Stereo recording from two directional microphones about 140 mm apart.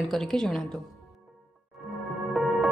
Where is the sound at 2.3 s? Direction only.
Centre (ahead or behind).